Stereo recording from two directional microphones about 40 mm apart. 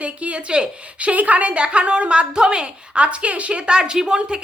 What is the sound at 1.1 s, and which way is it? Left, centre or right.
Speech, right.